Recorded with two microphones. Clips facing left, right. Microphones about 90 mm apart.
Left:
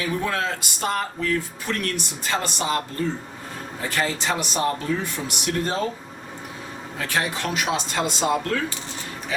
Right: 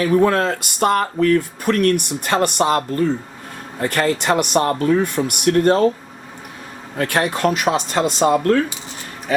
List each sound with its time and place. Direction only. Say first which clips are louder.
0.0 s speech: right 10 dB; 50° right (ahead or behind)
7.0 s speech: right 8 dB; 55° right (ahead or behind)